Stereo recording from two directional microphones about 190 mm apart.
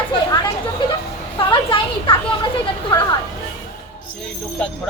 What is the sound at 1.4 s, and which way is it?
Speech, 25° left (ahead or behind).